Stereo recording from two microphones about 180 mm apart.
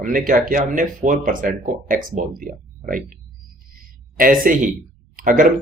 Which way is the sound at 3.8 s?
50° right (ahead or behind).